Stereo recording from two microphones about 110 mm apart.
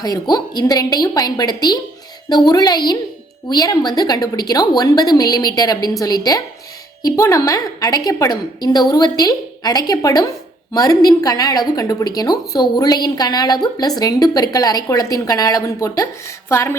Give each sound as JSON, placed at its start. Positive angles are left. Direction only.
{"t": 0.0, "sound": "a woman's voice", "side_deg": 35}